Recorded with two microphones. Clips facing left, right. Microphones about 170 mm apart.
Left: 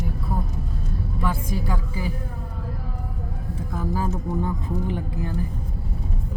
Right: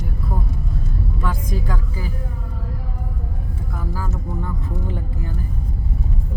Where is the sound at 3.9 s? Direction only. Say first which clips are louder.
Left 4 dB; 20° left (ahead or behind).